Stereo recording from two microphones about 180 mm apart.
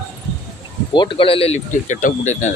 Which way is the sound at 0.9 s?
30° left (ahead or behind).